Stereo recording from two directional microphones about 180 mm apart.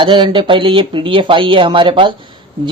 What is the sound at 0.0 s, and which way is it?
A man's voice, 25° right (ahead or behind).